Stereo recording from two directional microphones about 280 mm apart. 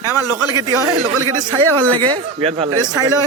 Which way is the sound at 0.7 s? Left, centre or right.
Right.